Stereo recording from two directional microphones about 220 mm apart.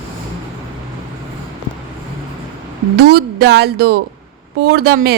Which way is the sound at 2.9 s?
45° right (ahead or behind).